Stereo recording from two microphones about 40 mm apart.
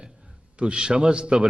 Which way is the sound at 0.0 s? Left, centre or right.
Centre.